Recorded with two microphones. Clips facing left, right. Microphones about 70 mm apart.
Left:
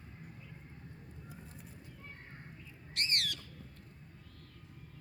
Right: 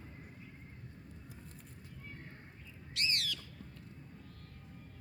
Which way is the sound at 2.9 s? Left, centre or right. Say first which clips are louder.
Left 1 dB; left.